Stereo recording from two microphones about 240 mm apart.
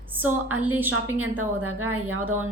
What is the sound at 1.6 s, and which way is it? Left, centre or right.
Speech, right.